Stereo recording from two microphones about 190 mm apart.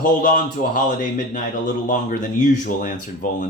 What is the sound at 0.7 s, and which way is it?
Speech, 45° left (ahead or behind).